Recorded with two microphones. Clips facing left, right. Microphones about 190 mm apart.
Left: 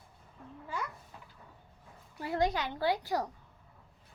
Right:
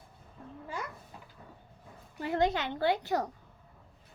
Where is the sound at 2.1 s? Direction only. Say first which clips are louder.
Right 2 dB; 25° right (ahead or behind).